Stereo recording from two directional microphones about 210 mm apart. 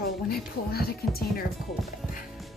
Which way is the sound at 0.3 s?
45° left (ahead or behind).